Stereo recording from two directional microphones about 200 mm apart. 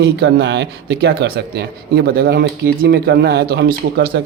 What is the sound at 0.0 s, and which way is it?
Speech, 55° right (ahead or behind).